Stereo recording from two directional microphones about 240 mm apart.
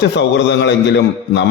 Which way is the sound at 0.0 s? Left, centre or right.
Left.